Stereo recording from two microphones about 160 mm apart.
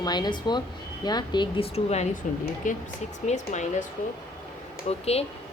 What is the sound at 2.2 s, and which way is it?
Speech, 55° left (ahead or behind).